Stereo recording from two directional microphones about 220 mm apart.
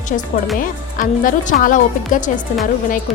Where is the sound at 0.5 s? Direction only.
40° left (ahead or behind).